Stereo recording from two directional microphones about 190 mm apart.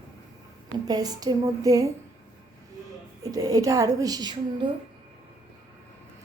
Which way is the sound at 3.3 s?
20° right (ahead or behind).